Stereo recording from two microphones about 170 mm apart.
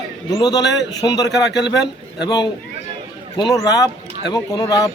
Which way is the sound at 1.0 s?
20° left (ahead or behind).